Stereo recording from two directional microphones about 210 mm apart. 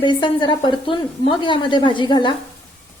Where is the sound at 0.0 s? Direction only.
20° left (ahead or behind).